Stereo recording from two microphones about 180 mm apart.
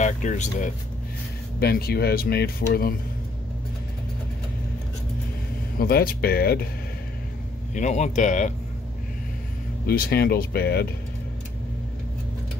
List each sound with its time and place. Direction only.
0.0 s a man's voice: 40° left (ahead or behind)
1.6 s speech: 60° left (ahead or behind)
5.8 s speech: 55° left (ahead or behind)
7.7 s a man's voice: 40° left (ahead or behind)
9.8 s speech: 60° left (ahead or behind)